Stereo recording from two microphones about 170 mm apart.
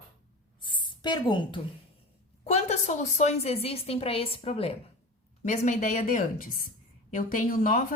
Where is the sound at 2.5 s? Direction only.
40° left (ahead or behind).